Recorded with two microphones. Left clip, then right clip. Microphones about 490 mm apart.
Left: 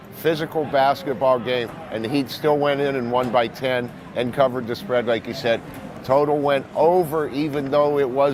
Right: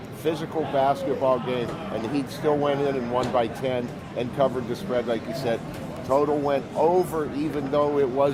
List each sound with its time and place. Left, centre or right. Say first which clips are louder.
0.3 s speech: left 5 dB; left